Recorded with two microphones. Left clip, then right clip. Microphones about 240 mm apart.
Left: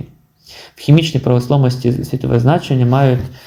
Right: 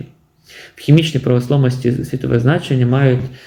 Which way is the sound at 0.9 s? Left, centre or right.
Centre.